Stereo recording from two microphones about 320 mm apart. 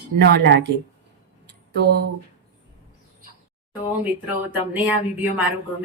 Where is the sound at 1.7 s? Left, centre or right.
Right.